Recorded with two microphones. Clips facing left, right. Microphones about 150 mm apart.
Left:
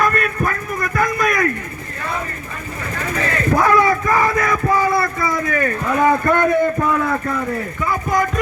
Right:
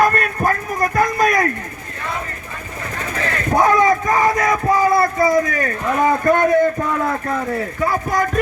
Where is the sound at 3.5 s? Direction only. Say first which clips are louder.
Right 1 dB; 35° right (ahead or behind).